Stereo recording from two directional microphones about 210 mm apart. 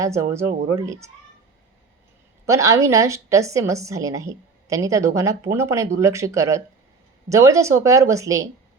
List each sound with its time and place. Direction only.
0.0 s a woman's voice: 15° right (ahead or behind)
2.5 s a woman's voice: 15° right (ahead or behind)